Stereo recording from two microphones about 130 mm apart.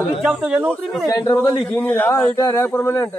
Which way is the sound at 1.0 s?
25° left (ahead or behind).